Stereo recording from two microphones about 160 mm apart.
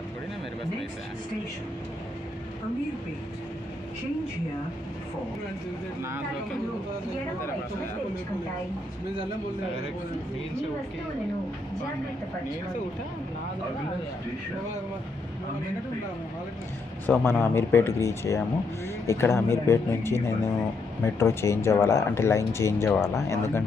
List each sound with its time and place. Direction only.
17.0 s speech: 15° left (ahead or behind)